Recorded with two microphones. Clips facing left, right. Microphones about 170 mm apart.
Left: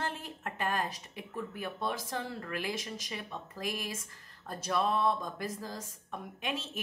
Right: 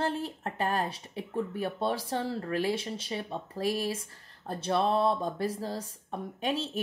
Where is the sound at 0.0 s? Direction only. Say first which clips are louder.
Right 7 dB; 30° right (ahead or behind).